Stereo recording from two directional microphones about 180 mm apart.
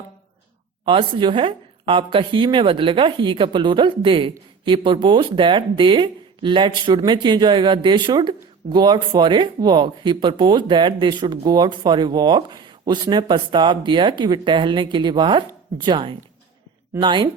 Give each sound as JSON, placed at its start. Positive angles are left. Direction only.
{"t": 0.9, "sound": "speech", "side_deg": -30}